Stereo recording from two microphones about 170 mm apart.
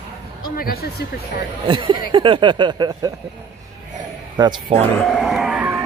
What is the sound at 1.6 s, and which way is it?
Speech, 30° right (ahead or behind).